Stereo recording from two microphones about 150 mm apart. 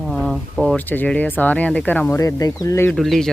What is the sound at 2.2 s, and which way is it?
Speech, 25° left (ahead or behind).